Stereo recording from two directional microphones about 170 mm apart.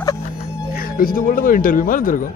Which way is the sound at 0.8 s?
55° left (ahead or behind).